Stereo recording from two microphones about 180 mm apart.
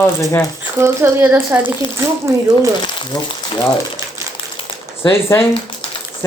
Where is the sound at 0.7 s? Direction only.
15° right (ahead or behind).